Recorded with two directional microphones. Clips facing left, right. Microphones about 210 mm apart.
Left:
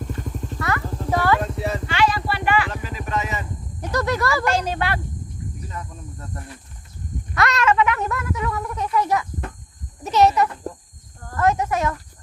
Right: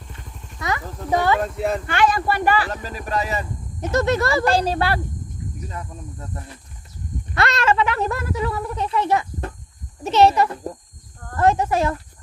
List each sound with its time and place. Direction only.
0.2 s vehicle: 45° left (ahead or behind)
0.6 s horse: 20° right (ahead or behind)
1.6 s vehicle: 50° right (ahead or behind); by 3.4 s 35° right (ahead or behind)
3.8 s speech: 25° right (ahead or behind)
7.3 s speech: 30° right (ahead or behind)